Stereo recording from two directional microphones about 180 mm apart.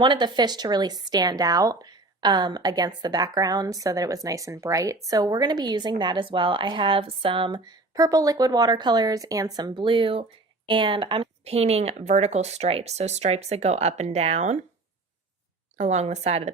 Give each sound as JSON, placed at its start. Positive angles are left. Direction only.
{"t": 0.0, "sound": "a woman's voice", "side_deg": -25}
{"t": 15.8, "sound": "speech", "side_deg": -40}